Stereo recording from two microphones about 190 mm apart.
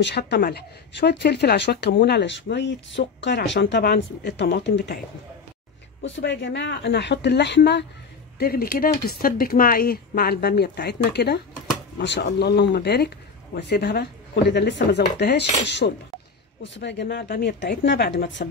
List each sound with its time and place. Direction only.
0.0 s speech: 60° left (ahead or behind)
6.0 s speech: 70° left (ahead or behind)
8.4 s speech: 50° left (ahead or behind)